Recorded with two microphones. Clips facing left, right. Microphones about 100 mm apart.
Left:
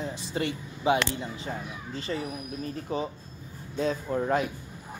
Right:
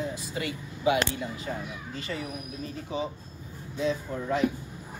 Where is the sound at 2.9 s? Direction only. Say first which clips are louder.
Even; 45° left (ahead or behind).